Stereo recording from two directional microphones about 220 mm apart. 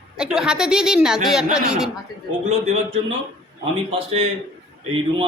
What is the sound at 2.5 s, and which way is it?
A man's voice, 30° right (ahead or behind).